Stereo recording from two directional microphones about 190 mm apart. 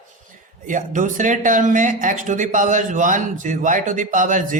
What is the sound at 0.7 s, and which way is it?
A man's voice, 45° right (ahead or behind).